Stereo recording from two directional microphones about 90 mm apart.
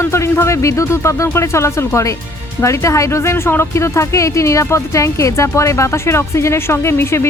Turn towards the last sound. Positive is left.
turn(degrees=30)  # may be behind; listen again after turning